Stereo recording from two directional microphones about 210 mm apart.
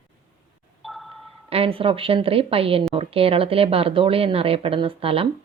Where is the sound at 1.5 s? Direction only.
25° right (ahead or behind).